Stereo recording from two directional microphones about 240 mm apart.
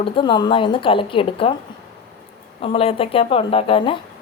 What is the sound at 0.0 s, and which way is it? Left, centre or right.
A woman's voice, centre.